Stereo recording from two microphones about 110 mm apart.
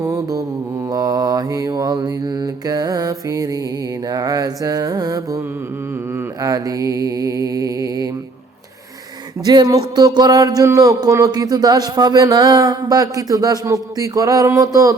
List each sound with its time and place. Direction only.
0.0 s mantra: 30° right (ahead or behind)
4.1 s music: 35° right (ahead or behind)
6.4 s mantra: 30° right (ahead or behind)
9.5 s speech: 35° right (ahead or behind)